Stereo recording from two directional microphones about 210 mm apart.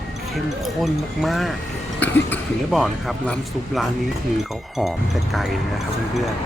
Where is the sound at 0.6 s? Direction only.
Centre (ahead or behind).